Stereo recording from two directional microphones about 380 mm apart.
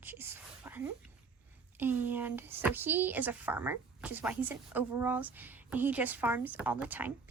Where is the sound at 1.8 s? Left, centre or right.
Centre.